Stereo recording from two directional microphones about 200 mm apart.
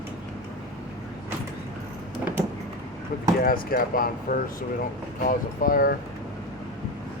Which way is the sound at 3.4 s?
45° left (ahead or behind).